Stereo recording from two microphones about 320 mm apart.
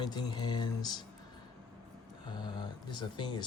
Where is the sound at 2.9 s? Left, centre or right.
Centre.